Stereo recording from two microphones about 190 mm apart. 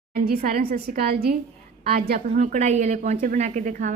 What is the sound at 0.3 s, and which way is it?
A woman's voice, 50° right (ahead or behind).